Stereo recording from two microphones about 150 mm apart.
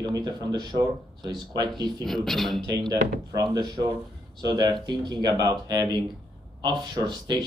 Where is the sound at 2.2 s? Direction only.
Centre (ahead or behind).